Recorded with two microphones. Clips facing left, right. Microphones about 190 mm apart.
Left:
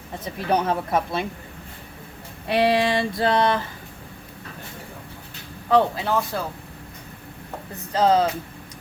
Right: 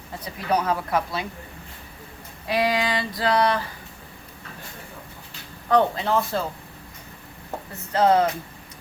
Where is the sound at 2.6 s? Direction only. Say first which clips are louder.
Left 4 dB; 30° left (ahead or behind).